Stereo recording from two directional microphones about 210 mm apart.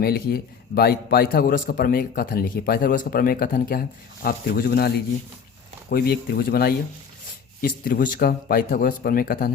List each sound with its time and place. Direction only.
0.0 s a man's voice: 50° left (ahead or behind)